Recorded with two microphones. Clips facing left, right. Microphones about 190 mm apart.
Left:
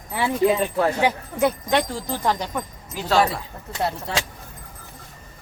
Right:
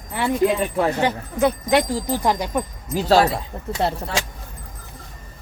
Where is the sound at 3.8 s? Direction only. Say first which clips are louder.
Right 2 dB; 30° right (ahead or behind).